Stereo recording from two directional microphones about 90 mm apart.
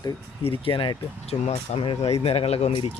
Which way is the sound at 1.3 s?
50° left (ahead or behind).